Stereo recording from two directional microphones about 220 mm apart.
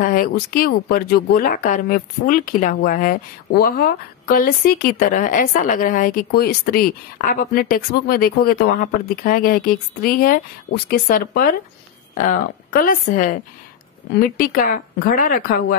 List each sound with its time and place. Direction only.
0.0 s speech: 40° left (ahead or behind)